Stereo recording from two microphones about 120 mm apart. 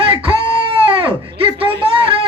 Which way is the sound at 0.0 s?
45° right (ahead or behind).